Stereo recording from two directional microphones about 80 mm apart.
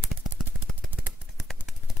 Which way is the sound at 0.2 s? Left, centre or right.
Centre.